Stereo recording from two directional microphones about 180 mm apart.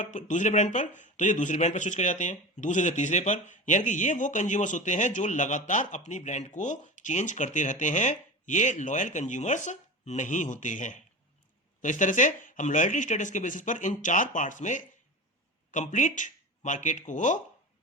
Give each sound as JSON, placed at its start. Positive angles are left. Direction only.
{"t": 0.0, "sound": "speech", "side_deg": 45}